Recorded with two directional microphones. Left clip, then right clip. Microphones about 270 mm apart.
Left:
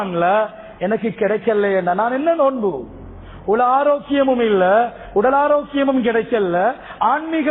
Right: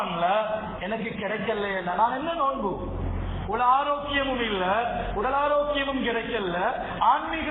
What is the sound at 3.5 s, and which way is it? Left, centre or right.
A man's voice, left.